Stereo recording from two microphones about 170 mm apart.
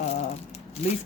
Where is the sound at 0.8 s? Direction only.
40° left (ahead or behind).